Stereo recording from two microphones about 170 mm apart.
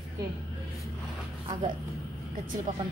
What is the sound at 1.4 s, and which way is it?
Speech, 30° right (ahead or behind).